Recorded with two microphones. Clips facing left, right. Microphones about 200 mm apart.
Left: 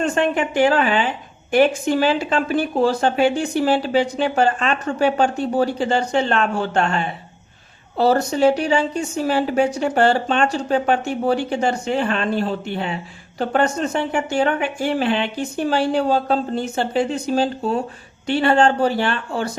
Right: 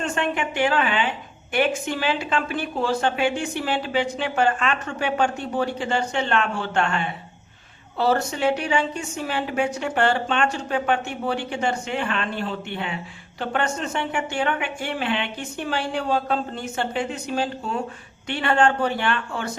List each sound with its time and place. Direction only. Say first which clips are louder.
0.0 s a woman's voice: left 6 dB; 40° left (ahead or behind)